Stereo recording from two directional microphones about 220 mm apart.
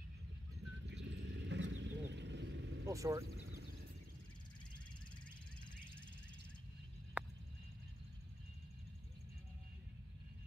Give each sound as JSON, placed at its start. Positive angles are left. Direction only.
{"t": 0.8, "sound": "horse", "side_deg": -55}
{"t": 2.9, "sound": "speech", "side_deg": -15}
{"t": 7.2, "sound": "a sound", "side_deg": -5}